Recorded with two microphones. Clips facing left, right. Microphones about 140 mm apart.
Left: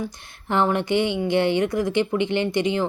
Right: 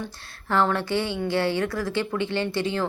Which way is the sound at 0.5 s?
20° left (ahead or behind).